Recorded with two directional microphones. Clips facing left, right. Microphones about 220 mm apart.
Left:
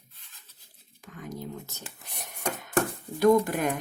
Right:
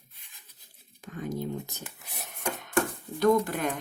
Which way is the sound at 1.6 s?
15° right (ahead or behind).